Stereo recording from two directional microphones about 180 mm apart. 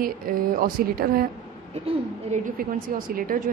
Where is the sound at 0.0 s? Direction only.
55° right (ahead or behind).